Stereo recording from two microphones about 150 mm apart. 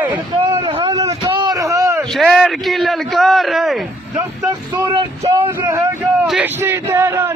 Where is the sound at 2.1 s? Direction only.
Centre (ahead or behind).